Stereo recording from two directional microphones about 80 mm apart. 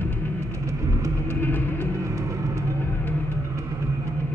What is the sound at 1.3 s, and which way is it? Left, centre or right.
Music, left.